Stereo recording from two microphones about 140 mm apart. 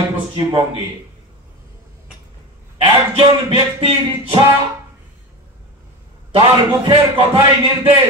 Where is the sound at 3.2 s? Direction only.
45° right (ahead or behind).